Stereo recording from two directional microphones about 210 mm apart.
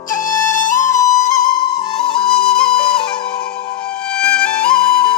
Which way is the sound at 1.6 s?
20° left (ahead or behind).